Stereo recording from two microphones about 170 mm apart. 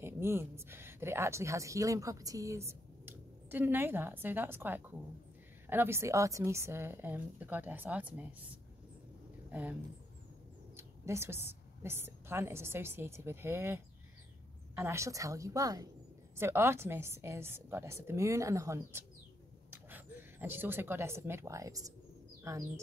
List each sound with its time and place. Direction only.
0.0 s a woman's voice: 15° right (ahead or behind)
9.5 s speech: 10° right (ahead or behind)
10.8 s a woman's voice: 15° right (ahead or behind)